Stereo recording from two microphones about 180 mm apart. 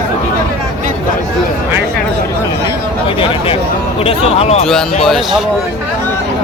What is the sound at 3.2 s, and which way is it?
Speech, 30° left (ahead or behind).